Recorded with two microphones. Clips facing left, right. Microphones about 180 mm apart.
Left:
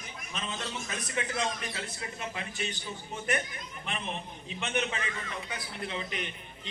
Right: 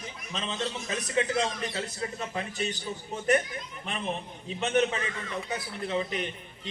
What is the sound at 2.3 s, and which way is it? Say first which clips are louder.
Speech: right 5 dB; 40° right (ahead or behind).